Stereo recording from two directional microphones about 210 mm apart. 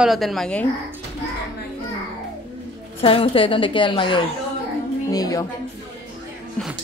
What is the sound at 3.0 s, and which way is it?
A woman's voice, 25° left (ahead or behind).